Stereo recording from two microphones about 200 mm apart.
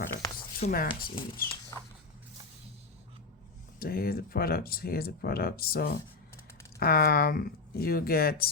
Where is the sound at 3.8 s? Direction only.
50° left (ahead or behind).